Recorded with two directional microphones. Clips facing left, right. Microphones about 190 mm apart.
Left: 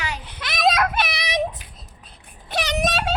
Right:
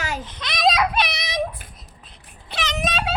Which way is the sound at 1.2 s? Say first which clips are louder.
Left 2 dB; 20° left (ahead or behind).